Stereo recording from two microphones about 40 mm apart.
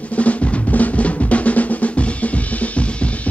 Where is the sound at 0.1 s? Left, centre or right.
Left.